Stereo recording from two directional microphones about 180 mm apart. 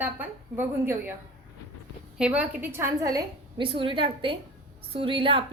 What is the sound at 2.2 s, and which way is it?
A woman's voice, 10° right (ahead or behind).